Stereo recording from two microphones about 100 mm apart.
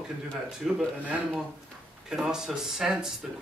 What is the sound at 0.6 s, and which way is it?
Speech, 5° right (ahead or behind).